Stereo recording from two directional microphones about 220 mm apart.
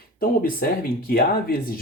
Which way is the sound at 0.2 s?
40° left (ahead or behind).